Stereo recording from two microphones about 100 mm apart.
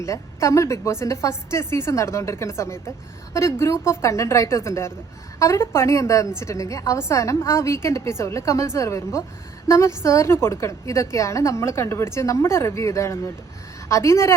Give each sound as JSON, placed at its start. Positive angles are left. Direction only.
{"t": 0.0, "sound": "a woman's voice", "side_deg": 30}